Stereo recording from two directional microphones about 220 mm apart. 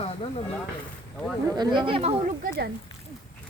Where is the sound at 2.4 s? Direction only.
45° right (ahead or behind).